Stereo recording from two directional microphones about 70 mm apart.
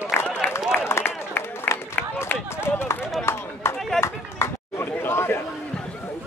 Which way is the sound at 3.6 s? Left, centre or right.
Left.